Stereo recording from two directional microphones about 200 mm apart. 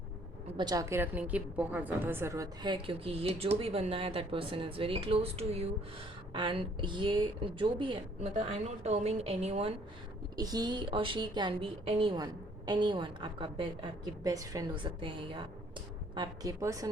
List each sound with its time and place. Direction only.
0.5 s a woman's voice: 20° right (ahead or behind)
10.3 s a woman's voice: 20° right (ahead or behind)